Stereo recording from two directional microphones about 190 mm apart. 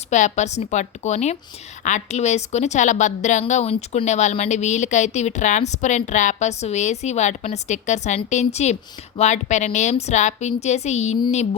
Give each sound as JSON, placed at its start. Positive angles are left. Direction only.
{"t": 0.1, "sound": "a woman's voice", "side_deg": 40}